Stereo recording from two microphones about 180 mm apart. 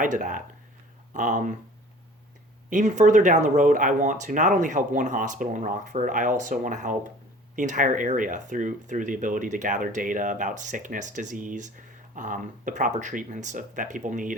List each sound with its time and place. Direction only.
0.0 s speech: 45° right (ahead or behind)
2.6 s speech: 45° right (ahead or behind)